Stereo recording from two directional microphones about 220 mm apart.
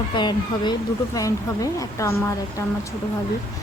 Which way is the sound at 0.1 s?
20° left (ahead or behind).